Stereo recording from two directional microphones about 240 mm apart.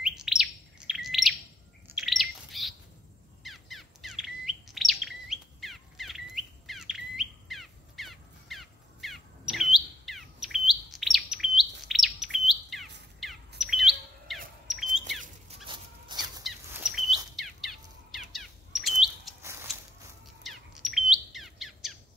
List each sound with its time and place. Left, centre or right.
0.0 s bird: centre
3.4 s chirp: centre
13.2 s bird: centre
13.6 s chirp: centre
15.6 s a sound: centre
16.4 s bird: centre
19.4 s a sound: centre
20.4 s bird: centre